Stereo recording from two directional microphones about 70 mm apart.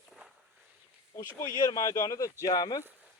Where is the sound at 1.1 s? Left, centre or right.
Left.